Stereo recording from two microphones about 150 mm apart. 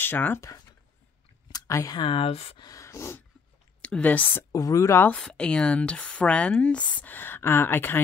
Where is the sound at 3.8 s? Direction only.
10° left (ahead or behind).